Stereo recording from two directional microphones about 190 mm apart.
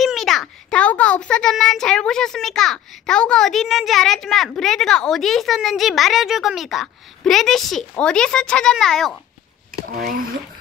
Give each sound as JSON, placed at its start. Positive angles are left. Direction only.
{"t": 0.0, "sound": "a child's voice", "side_deg": 0}
{"t": 9.9, "sound": "speech", "side_deg": -50}